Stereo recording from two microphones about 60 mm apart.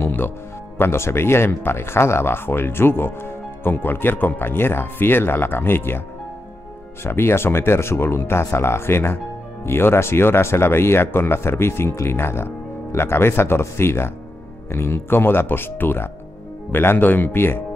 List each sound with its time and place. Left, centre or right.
0.0 s music: left
0.7 s speech: left